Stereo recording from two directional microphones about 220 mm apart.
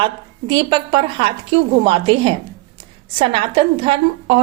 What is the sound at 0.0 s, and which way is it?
A woman's voice, 20° right (ahead or behind).